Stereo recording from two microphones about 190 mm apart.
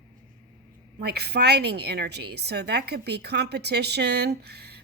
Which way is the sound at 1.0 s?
60° right (ahead or behind).